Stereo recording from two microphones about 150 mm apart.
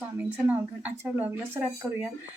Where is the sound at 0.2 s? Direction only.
10° right (ahead or behind).